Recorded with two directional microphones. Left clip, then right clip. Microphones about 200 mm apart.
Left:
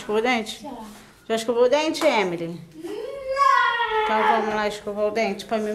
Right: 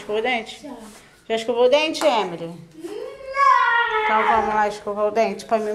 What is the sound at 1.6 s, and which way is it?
Speech, 45° left (ahead or behind).